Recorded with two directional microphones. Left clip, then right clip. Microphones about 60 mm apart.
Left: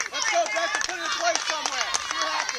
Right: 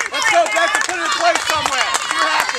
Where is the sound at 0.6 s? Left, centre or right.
Left.